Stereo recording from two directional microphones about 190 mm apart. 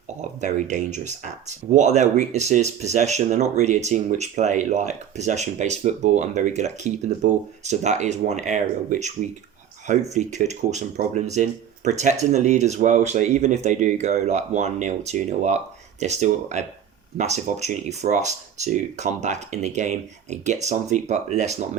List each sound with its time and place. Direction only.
0.2 s speech: 40° right (ahead or behind)